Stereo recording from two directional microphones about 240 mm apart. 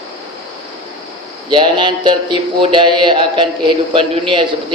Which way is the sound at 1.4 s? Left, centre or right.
Centre.